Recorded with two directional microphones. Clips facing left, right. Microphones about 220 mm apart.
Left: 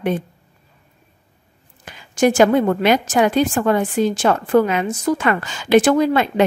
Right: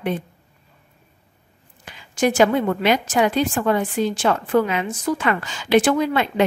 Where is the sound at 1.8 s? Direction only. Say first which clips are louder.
Left 4 dB; 45° left (ahead or behind).